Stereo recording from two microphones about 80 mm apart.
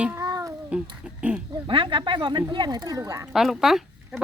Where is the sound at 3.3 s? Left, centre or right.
Centre.